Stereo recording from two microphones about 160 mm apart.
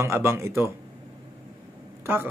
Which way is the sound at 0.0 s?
15° right (ahead or behind).